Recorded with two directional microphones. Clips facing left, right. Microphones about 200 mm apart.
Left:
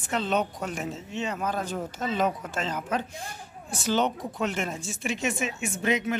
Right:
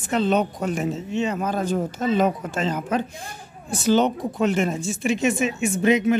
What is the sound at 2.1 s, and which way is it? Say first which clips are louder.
Speech: right 5 dB; 5° right (ahead or behind).